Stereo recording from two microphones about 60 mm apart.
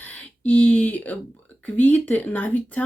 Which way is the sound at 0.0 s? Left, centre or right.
Left.